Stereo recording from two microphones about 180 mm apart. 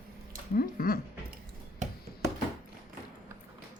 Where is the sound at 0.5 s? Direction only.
55° left (ahead or behind).